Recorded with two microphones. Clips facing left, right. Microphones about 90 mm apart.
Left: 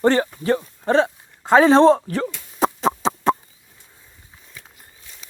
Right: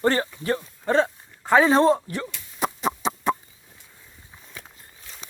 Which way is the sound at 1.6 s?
25° left (ahead or behind).